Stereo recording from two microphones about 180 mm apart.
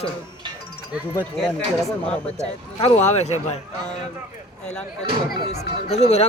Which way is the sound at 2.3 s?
35° left (ahead or behind).